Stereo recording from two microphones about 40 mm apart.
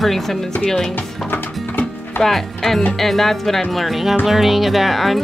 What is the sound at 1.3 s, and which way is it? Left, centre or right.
Music, left.